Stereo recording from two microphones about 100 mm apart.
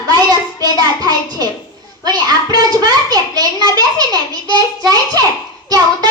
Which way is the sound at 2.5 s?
40° right (ahead or behind).